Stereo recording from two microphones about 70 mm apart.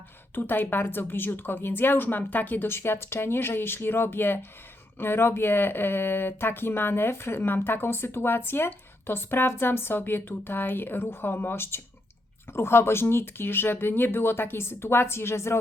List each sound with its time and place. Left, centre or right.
0.3 s speech: left